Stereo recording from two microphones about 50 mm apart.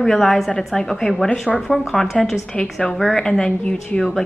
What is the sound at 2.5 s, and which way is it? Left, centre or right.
A woman's voice, left.